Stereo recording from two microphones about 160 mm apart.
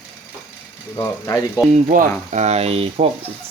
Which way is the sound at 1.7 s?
55° right (ahead or behind).